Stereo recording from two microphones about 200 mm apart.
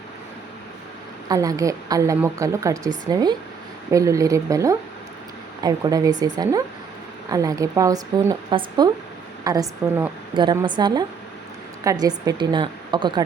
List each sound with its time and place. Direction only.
1.3 s a woman's voice: 15° right (ahead or behind)